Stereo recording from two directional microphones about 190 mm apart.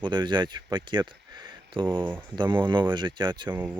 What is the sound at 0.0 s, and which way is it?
Speech, 25° right (ahead or behind).